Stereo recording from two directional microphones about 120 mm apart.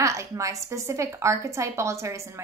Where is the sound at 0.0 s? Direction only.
25° right (ahead or behind).